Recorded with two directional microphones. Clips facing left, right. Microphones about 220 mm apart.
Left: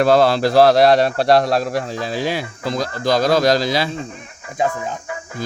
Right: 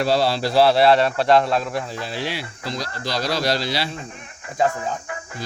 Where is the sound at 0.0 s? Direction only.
50° left (ahead or behind).